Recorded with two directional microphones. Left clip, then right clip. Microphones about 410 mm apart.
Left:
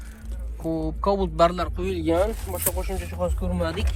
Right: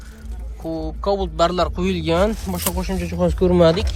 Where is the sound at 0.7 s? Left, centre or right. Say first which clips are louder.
Right 2 dB; centre.